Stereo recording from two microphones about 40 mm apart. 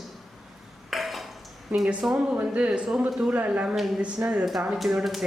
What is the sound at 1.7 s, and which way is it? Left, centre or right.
Speech, right.